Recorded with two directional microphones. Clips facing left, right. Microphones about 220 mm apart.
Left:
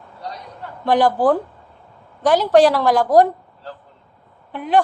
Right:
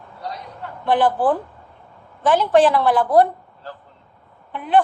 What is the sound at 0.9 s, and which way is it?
A woman's voice, 40° left (ahead or behind).